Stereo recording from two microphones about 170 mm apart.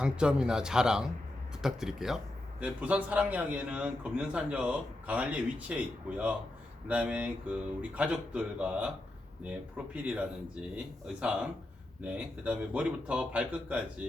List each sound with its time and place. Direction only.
0.0 s a man's voice: 5° right (ahead or behind)